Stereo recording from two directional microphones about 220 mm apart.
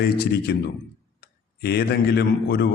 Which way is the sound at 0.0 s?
50° left (ahead or behind).